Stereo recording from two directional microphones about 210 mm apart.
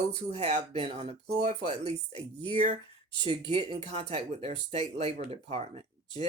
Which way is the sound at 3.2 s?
30° right (ahead or behind).